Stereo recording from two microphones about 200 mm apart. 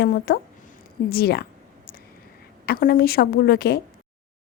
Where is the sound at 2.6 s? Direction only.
50° left (ahead or behind).